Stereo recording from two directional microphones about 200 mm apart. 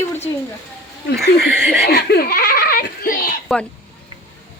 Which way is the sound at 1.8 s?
50° left (ahead or behind).